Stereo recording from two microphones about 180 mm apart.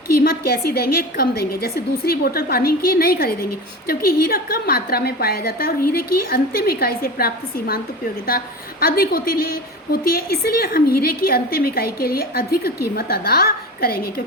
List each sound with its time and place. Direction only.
0.2 s a woman's voice: 60° left (ahead or behind)